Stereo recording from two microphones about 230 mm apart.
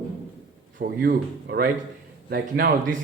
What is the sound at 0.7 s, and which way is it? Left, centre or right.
Speech, right.